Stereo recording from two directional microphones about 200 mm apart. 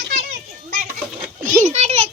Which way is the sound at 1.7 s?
30° right (ahead or behind).